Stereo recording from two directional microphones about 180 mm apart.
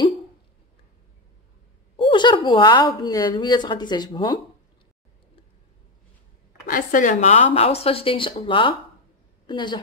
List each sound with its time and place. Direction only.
2.0 s a sound: 25° left (ahead or behind)
3.0 s speech: 25° left (ahead or behind)
6.7 s speech: 50° left (ahead or behind); by 9.8 s 25° left (ahead or behind)